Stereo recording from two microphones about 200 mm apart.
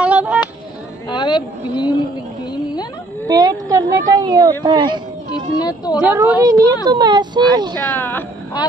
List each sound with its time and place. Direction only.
0.0 s a sound: 5° right (ahead or behind)
1.0 s vehicle: 20° left (ahead or behind)
3.3 s speech: 20° right (ahead or behind)
5.6 s speech: 20° left (ahead or behind)
6.0 s speech: 10° right (ahead or behind)
7.9 s speech: 10° left (ahead or behind)